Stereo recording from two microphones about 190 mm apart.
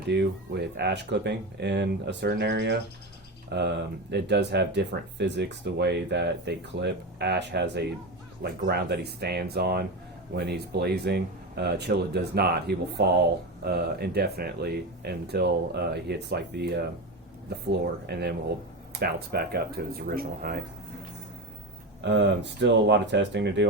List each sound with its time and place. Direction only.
0.1 s speech: 65° right (ahead or behind)
22.0 s speech: 65° right (ahead or behind)